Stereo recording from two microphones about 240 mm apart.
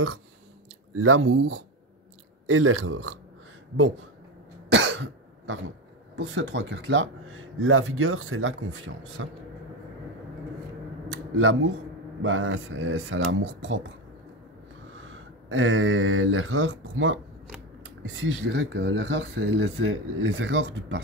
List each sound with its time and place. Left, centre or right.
0.9 s speech: right
4.6 s cough: right
6.1 s speech: right
11.3 s speech: right
15.5 s speech: right